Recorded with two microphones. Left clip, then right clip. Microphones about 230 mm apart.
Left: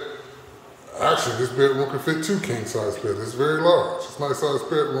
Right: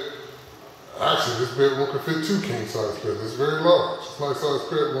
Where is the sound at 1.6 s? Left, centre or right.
Left.